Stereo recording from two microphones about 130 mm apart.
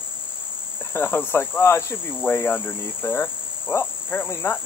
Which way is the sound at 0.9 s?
15° left (ahead or behind).